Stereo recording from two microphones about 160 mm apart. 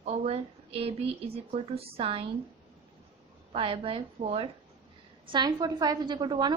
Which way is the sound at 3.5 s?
35° right (ahead or behind).